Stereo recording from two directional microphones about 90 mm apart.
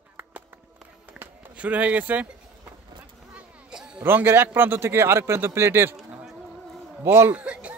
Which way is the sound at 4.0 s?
25° right (ahead or behind).